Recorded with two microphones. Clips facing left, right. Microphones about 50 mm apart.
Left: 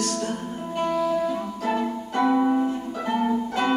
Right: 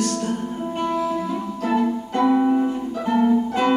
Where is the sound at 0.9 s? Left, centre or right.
Centre.